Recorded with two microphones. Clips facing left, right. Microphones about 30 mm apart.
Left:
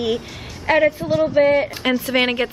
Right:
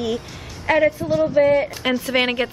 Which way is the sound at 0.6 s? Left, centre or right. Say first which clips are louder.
Left 1 dB; centre.